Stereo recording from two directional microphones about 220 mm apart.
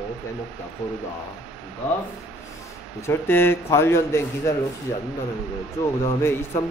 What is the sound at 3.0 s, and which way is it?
A man's voice, 10° left (ahead or behind).